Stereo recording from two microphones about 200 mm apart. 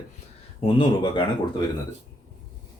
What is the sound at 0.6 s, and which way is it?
Speech, 25° left (ahead or behind).